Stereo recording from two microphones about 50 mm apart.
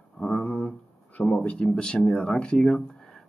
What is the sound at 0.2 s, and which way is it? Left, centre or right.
Speech, left.